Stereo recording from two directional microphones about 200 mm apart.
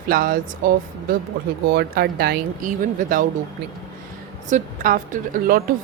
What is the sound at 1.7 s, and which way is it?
A woman's voice, 50° right (ahead or behind).